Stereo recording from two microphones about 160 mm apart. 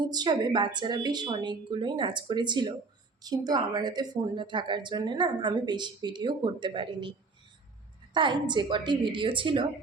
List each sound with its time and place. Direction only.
0.0 s a woman's voice: 25° right (ahead or behind)
8.1 s a woman's voice: 30° right (ahead or behind)